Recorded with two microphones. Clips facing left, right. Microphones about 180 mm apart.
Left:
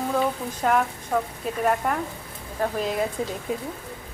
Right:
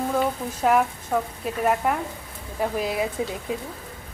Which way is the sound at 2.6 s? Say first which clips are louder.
Even; 10° right (ahead or behind).